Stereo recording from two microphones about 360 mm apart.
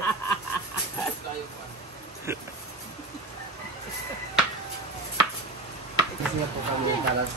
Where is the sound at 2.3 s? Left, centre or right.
Centre.